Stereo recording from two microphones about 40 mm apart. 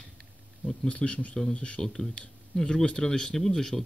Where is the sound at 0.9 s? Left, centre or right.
Left.